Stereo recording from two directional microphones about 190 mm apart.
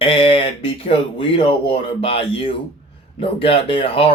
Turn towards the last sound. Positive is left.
turn(degrees=30)  # may be behind; listen again after turning